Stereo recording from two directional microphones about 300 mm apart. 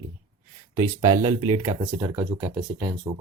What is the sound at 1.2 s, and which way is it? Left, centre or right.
Speech, centre.